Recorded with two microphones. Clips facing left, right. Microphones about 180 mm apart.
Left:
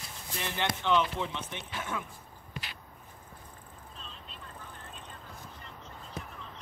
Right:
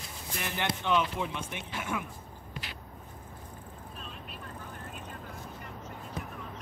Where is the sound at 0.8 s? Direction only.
15° right (ahead or behind).